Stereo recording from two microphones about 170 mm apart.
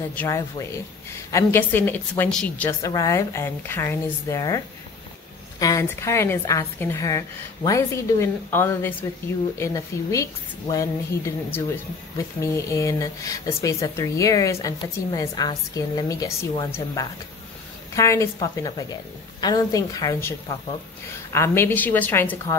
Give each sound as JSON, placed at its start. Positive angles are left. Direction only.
{"t": 0.1, "sound": "a woman's voice", "side_deg": 15}
{"t": 2.8, "sound": "a woman's voice", "side_deg": 20}
{"t": 5.6, "sound": "a woman's voice", "side_deg": 20}